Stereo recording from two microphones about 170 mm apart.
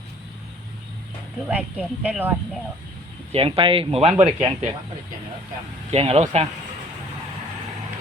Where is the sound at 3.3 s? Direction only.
35° right (ahead or behind).